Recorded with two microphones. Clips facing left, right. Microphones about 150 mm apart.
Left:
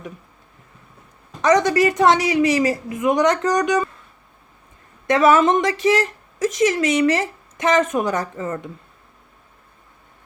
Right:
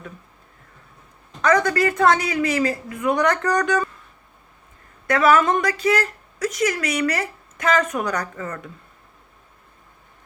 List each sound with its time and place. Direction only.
1.4 s a woman's voice: 20° left (ahead or behind)
5.0 s a woman's voice: 20° left (ahead or behind)